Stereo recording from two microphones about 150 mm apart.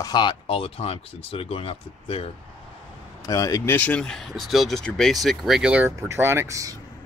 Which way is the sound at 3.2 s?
25° left (ahead or behind).